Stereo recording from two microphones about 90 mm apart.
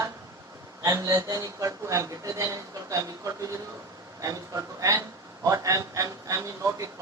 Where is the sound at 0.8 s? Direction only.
35° right (ahead or behind).